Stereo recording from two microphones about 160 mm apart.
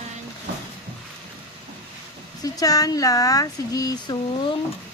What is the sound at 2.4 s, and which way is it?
Speech, 25° left (ahead or behind).